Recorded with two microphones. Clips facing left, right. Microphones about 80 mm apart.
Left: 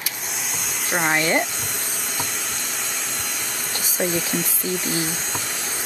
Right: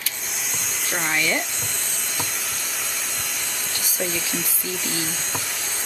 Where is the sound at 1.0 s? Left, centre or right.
Left.